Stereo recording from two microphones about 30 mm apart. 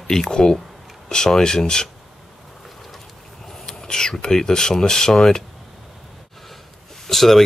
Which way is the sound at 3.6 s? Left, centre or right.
Centre.